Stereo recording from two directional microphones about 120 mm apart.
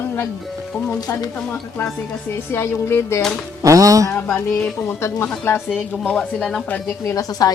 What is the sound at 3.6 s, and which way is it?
Speech, 30° right (ahead or behind).